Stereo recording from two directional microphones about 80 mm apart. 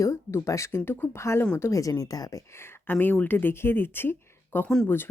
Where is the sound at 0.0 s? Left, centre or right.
Left.